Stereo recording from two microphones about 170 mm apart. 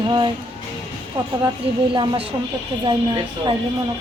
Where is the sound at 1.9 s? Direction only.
30° right (ahead or behind).